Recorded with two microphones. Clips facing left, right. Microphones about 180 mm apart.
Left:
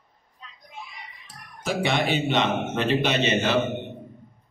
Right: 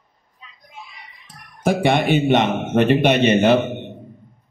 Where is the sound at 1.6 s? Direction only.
55° right (ahead or behind).